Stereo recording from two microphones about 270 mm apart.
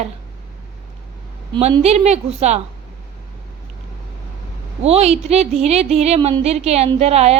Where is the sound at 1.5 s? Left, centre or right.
Right.